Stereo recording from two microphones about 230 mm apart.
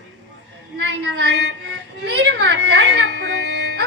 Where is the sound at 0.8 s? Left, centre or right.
Right.